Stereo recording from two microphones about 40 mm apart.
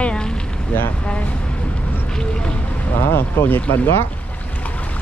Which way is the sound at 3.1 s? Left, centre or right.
Left.